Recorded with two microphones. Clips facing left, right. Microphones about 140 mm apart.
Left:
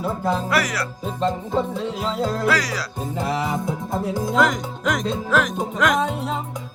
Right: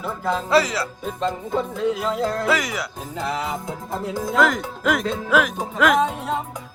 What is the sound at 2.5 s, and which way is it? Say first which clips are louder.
Music: even; 20° right (ahead or behind).